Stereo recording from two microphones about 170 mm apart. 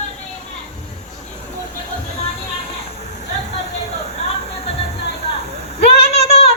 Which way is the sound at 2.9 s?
40° left (ahead or behind).